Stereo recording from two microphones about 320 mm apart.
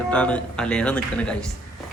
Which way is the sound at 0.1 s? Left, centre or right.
Centre.